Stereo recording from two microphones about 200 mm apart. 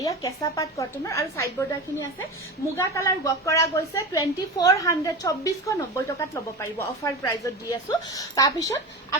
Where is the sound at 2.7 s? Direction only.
15° left (ahead or behind).